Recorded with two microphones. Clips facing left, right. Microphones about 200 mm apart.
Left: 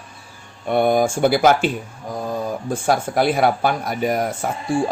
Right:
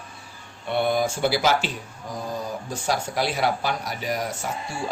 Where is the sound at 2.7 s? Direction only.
50° left (ahead or behind).